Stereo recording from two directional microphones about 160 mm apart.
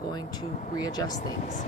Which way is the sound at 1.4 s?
50° left (ahead or behind).